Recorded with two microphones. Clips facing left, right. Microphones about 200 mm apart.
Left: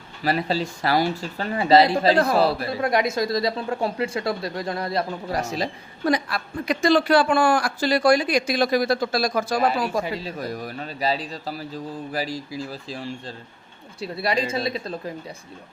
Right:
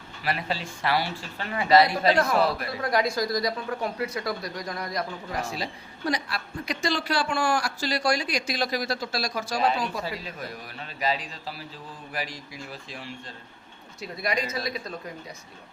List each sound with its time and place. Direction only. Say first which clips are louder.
0.2 s speech: left 7 dB; 35° left (ahead or behind)
5.4 s a woman's voice: left 5 dB; 45° left (ahead or behind)
10.0 s a man's voice: left 6 dB; 25° left (ahead or behind)